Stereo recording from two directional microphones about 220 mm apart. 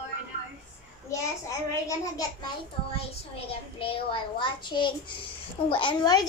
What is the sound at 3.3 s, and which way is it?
A child's voice, 25° left (ahead or behind).